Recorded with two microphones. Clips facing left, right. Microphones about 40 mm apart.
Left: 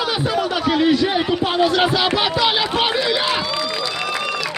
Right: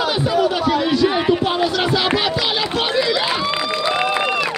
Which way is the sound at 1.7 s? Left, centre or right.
Centre.